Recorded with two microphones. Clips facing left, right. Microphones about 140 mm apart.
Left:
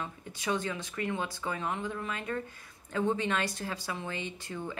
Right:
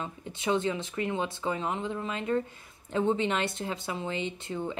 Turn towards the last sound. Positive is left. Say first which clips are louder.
# right 5 dB
turn(degrees=-25)  # may be behind; listen again after turning